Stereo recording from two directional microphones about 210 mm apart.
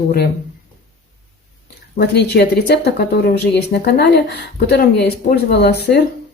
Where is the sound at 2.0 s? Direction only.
50° left (ahead or behind).